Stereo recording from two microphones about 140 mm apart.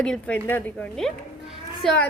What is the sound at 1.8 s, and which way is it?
Child singing, 5° left (ahead or behind).